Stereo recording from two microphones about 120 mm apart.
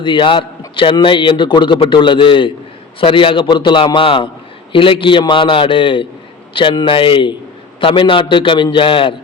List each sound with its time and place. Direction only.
0.0 s a man's voice: 45° left (ahead or behind)